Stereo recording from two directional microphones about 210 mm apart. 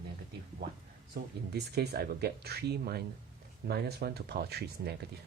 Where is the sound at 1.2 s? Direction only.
50° right (ahead or behind).